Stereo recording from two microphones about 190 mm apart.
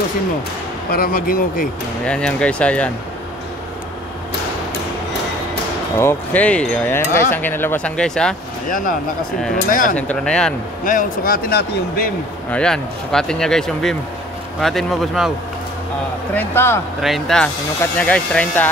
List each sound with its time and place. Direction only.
0.9 s a man's voice: 50° left (ahead or behind)
2.0 s speech: 5° left (ahead or behind)
5.9 s speech: 10° left (ahead or behind)
8.6 s a man's voice: 45° left (ahead or behind)
9.9 s speech: 5° left (ahead or behind)
10.8 s a man's voice: 45° left (ahead or behind)
12.4 s speech: 5° left (ahead or behind)
16.3 s speech: 10° left (ahead or behind)
17.0 s speech: centre (ahead or behind)